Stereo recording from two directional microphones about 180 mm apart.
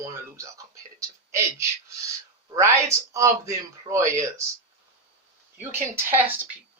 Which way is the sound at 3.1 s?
15° right (ahead or behind).